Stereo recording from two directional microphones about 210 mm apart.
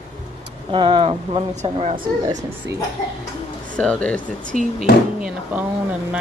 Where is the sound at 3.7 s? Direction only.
5° left (ahead or behind).